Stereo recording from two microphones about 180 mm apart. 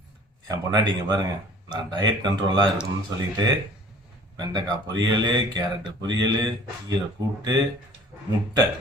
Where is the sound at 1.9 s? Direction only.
25° right (ahead or behind).